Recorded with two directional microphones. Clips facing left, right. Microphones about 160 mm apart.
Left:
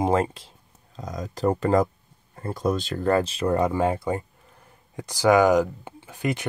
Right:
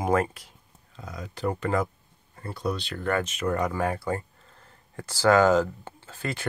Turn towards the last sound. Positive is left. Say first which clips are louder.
# left 5 dB
turn(degrees=15)  # may be behind; listen again after turning